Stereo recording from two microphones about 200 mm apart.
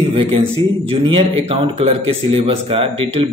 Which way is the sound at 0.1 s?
30° right (ahead or behind).